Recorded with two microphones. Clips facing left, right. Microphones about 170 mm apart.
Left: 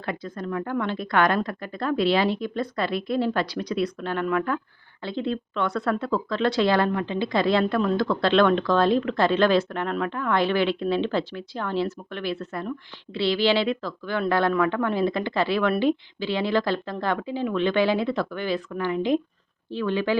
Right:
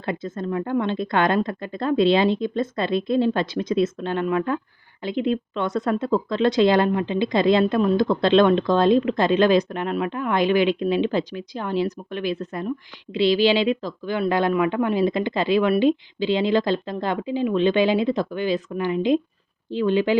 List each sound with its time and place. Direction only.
0.0 s a woman's voice: 25° right (ahead or behind)